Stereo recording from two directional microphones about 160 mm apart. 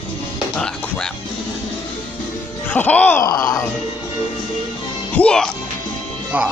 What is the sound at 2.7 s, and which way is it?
Speech, 10° left (ahead or behind).